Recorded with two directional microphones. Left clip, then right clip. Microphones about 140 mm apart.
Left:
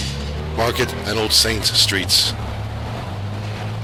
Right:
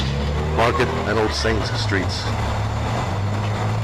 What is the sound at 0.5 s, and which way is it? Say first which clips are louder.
Speech: right 1 dB; 40° left (ahead or behind).